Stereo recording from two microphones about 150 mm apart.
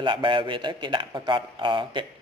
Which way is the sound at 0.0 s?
35° right (ahead or behind).